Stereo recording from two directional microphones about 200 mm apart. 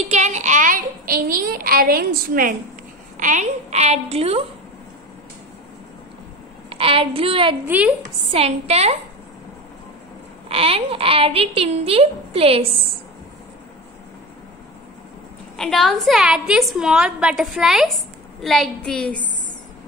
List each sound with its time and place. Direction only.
0.1 s child singing: 35° right (ahead or behind)
3.2 s a woman's voice: 35° right (ahead or behind)
6.7 s a child's voice: 25° right (ahead or behind)
7.6 s a woman's voice: 10° right (ahead or behind)
8.0 s a woman's voice: 30° right (ahead or behind)
10.5 s a child's voice: 30° right (ahead or behind)
15.5 s a woman's voice: centre (ahead or behind)